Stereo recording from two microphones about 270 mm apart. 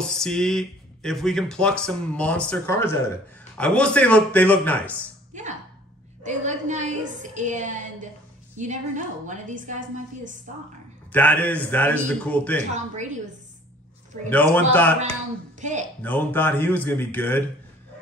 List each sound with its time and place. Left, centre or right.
0.0 s speech: centre
5.3 s a woman's voice: right
11.1 s speech: centre
12.7 s a woman's voice: right
14.3 s a man's voice: centre
15.6 s a woman's voice: right
16.0 s a man's voice: centre